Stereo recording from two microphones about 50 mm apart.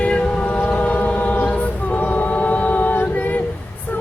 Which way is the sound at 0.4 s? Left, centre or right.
Left.